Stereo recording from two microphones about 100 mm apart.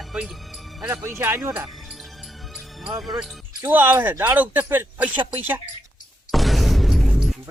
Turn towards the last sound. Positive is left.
turn(degrees=-5)  # may be behind; listen again after turning